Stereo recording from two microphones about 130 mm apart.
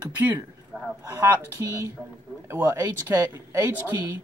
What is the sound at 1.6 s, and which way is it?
Speech, 20° right (ahead or behind).